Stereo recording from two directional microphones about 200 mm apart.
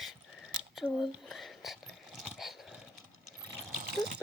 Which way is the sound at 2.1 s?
Centre (ahead or behind).